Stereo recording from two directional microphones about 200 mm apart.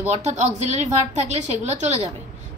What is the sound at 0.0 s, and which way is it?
A woman's voice, 35° right (ahead or behind).